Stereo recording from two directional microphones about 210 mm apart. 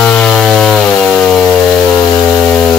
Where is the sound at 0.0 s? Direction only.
5° left (ahead or behind).